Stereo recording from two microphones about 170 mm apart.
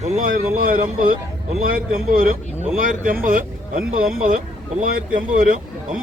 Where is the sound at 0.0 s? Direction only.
50° right (ahead or behind).